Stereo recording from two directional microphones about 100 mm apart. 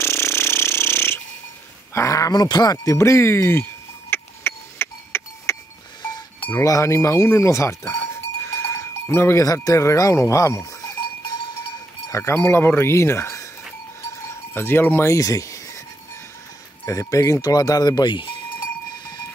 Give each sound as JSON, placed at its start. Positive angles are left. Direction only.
{"t": 0.0, "sound": "jackhammer", "side_deg": 25}
{"t": 2.0, "sound": "speech", "side_deg": 35}
{"t": 4.1, "sound": "a sound", "side_deg": 25}
{"t": 6.6, "sound": "speech", "side_deg": 35}
{"t": 8.5, "sound": "sheep", "side_deg": 25}
{"t": 12.1, "sound": "speech", "side_deg": 30}
{"t": 14.5, "sound": "speech", "side_deg": 20}
{"t": 15.1, "sound": "a sound", "side_deg": 35}
{"t": 16.8, "sound": "speech", "side_deg": 30}